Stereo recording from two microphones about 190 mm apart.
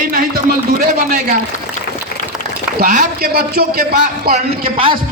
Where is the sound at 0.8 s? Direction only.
40° right (ahead or behind).